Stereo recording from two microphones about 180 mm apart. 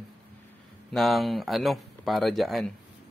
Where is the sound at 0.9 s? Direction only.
Centre (ahead or behind).